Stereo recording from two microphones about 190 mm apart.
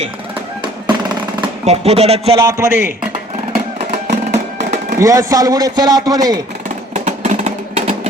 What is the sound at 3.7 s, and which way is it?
Music, 35° right (ahead or behind).